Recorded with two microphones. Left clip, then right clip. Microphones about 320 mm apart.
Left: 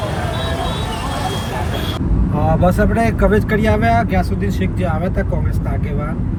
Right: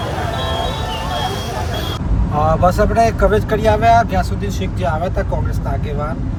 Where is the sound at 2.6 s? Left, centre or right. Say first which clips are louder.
Right 3 dB; right.